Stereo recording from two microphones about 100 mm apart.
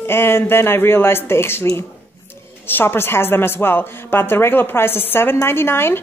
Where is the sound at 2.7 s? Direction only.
20° left (ahead or behind).